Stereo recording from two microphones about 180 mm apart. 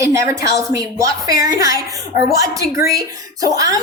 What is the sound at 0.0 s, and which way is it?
A woman's voice, 15° right (ahead or behind).